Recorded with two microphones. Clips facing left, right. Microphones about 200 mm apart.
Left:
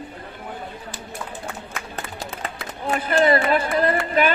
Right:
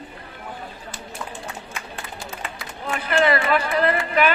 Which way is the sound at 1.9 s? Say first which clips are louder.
Left 3 dB; 40° left (ahead or behind).